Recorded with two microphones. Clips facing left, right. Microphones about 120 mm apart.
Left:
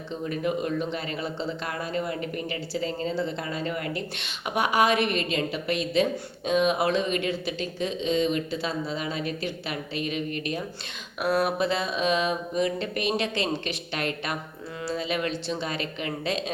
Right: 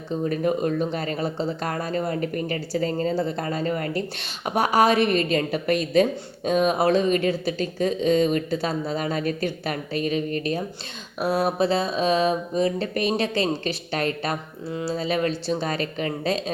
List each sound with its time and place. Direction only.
0.1 s a woman's voice: 40° right (ahead or behind)
14.7 s speech: 25° right (ahead or behind)
14.9 s speech: 40° right (ahead or behind)